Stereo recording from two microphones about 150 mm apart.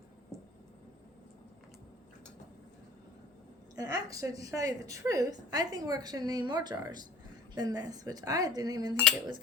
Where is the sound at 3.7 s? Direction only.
25° right (ahead or behind).